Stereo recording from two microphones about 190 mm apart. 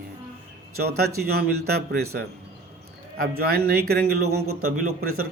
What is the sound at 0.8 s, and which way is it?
A man's voice, 55° right (ahead or behind).